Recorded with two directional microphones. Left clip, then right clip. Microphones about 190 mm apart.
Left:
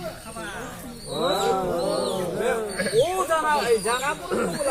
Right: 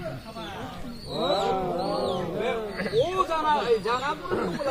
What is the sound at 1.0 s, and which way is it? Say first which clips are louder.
Speech: left 2 dB; 20° right (ahead or behind).